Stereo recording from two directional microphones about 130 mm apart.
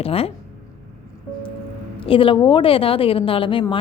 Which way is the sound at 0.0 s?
50° left (ahead or behind).